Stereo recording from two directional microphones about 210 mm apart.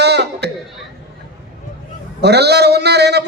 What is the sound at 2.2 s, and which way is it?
A man's voice, 50° right (ahead or behind).